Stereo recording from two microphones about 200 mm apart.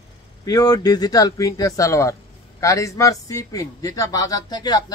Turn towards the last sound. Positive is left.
turn(degrees=20)  # may be behind; listen again after turning